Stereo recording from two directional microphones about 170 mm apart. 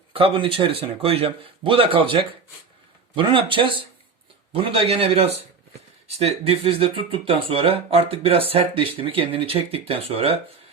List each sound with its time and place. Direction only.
0.1 s speech: 35° right (ahead or behind)